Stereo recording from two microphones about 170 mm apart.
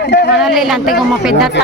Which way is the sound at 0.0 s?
90° left.